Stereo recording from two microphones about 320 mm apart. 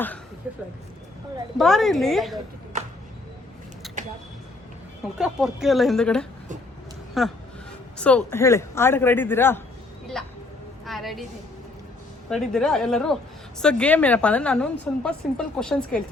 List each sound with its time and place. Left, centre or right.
1.5 s a woman's voice: centre
3.8 s a sound: centre
5.1 s a woman's voice: centre
10.2 s vehicle: centre
10.8 s a woman's voice: centre
12.3 s a woman's voice: centre